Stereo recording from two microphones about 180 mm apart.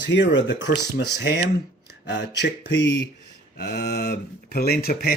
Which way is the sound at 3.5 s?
65° left (ahead or behind).